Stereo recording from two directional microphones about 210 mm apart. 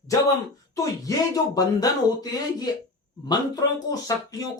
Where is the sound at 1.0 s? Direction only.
15° left (ahead or behind).